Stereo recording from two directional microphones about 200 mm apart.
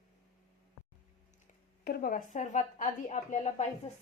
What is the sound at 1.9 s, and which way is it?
A woman's voice, 45° left (ahead or behind).